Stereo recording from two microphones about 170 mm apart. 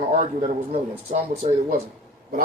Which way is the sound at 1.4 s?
40° right (ahead or behind).